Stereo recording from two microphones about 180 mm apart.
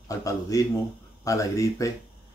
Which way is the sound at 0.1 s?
20° left (ahead or behind).